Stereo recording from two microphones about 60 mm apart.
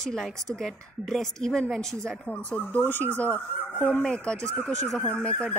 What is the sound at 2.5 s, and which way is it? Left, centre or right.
Speech, left.